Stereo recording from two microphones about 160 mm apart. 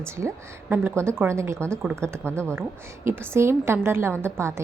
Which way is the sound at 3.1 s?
15° right (ahead or behind).